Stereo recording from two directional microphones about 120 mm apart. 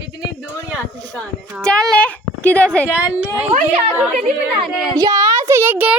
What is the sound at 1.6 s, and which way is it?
A woman's voice, 5° left (ahead or behind).